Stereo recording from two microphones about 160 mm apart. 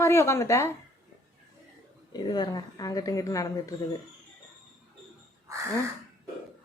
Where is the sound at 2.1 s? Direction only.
25° left (ahead or behind).